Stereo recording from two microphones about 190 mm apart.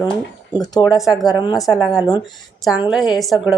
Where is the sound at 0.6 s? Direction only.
20° left (ahead or behind).